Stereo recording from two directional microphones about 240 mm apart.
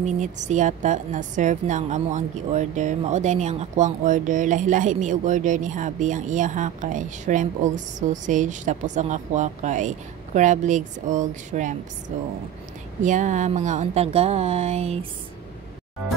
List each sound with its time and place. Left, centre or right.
0.0 s a woman's voice: right